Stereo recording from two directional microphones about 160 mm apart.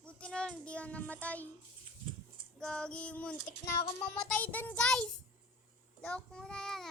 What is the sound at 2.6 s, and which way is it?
Child singing, 5° left (ahead or behind).